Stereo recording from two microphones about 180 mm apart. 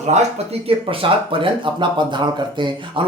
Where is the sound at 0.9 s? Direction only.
30° right (ahead or behind).